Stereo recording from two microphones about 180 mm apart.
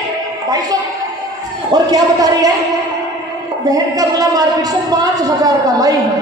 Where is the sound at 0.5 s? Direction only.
20° right (ahead or behind).